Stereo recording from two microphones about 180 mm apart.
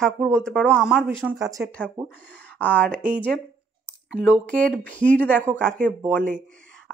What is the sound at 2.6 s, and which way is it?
Speech, 10° left (ahead or behind).